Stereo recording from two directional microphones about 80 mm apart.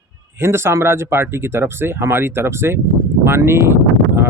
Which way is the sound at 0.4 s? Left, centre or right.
Right.